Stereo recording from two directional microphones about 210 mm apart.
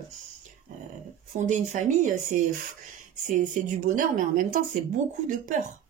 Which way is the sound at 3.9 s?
40° right (ahead or behind).